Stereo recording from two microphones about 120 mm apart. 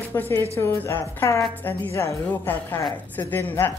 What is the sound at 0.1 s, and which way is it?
A woman's voice, 20° left (ahead or behind).